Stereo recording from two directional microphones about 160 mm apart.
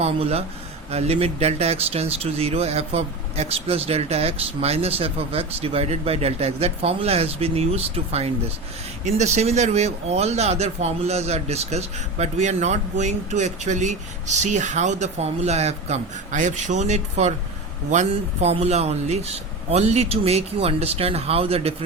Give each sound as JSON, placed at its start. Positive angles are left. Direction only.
{"t": 0.0, "sound": "speech", "side_deg": -40}